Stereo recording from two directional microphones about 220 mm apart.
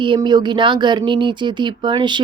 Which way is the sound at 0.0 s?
20° right (ahead or behind).